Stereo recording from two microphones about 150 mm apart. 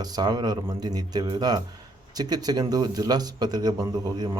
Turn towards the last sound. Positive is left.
turn(degrees=-25)  # may be behind; listen again after turning